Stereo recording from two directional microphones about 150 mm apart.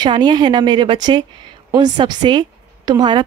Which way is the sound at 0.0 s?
30° right (ahead or behind).